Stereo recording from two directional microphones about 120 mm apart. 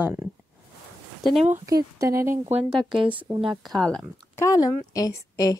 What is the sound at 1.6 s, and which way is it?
Speech, 30° right (ahead or behind).